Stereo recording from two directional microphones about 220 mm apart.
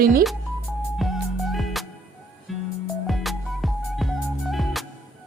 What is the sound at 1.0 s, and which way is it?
Music, centre (ahead or behind).